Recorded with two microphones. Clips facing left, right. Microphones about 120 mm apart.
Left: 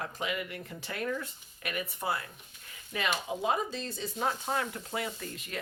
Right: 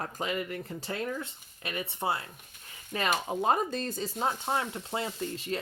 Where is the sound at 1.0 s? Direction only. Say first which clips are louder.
Left 1 dB; 25° right (ahead or behind).